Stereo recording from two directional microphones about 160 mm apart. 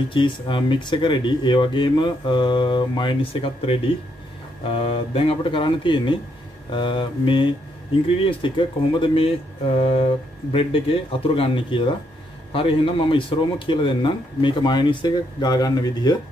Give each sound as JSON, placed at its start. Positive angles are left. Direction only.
{"t": 0.1, "sound": "speech", "side_deg": 30}